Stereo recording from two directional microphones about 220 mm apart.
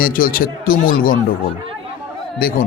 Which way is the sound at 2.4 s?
40° left (ahead or behind).